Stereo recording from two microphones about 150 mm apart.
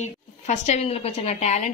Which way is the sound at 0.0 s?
50° left (ahead or behind).